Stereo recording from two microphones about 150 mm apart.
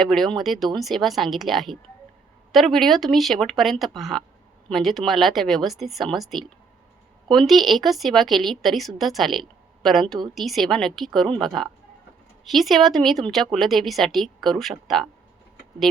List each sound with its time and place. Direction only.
0.0 s a woman's voice: centre (ahead or behind)